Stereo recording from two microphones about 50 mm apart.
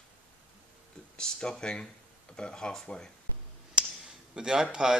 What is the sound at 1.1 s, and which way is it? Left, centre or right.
Speech, centre.